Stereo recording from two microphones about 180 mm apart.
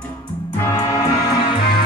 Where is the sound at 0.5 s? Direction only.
15° left (ahead or behind).